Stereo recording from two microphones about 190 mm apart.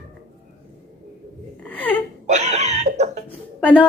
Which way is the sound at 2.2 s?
35° right (ahead or behind).